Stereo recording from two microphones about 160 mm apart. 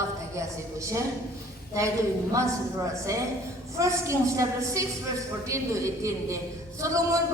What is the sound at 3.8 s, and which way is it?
A woman's voice, 20° right (ahead or behind).